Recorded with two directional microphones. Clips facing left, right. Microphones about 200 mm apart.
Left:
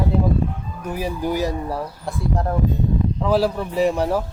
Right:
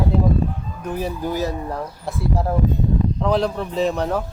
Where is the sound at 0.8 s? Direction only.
10° left (ahead or behind).